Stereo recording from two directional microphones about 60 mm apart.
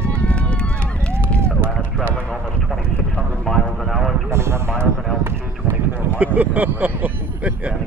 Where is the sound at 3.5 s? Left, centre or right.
Centre.